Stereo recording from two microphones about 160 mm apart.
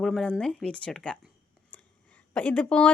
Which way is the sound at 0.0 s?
5° left (ahead or behind).